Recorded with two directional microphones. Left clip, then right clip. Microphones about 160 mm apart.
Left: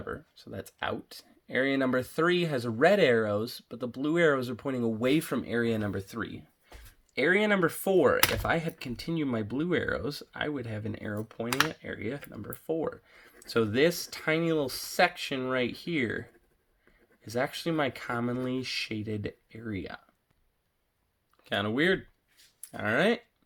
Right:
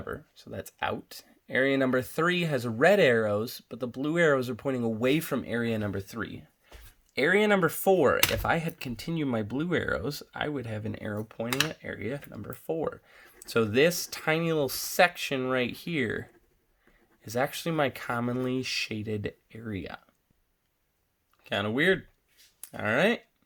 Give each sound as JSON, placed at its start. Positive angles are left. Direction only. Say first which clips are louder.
{"t": 0.0, "sound": "speech", "louder": "right 1 dB", "side_deg": -20}
{"t": 7.1, "sound": "speech", "louder": "right 2 dB", "side_deg": -25}
{"t": 17.2, "sound": "speech", "louder": "right 1 dB", "side_deg": -30}
{"t": 21.4, "sound": "speech", "louder": "right 2 dB", "side_deg": -15}